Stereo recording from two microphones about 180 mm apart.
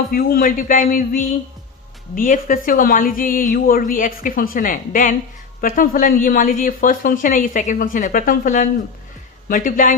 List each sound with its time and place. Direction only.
0.1 s speech: 55° left (ahead or behind)